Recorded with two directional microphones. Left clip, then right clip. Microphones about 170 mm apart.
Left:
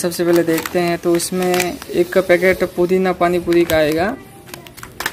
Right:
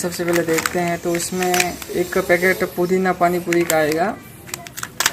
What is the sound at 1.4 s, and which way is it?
Speech, 45° left (ahead or behind).